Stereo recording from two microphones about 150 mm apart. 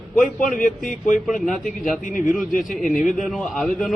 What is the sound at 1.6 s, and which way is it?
Speech, 60° left (ahead or behind).